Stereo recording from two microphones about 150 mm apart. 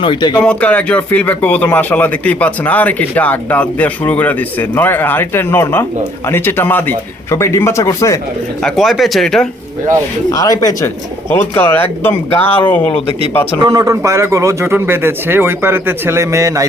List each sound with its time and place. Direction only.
0.0 s speech: 30° left (ahead or behind)
0.3 s speech: 10° left (ahead or behind)
8.6 s speech: centre (ahead or behind)
10.2 s speech: 25° left (ahead or behind)
13.6 s speech: 20° right (ahead or behind)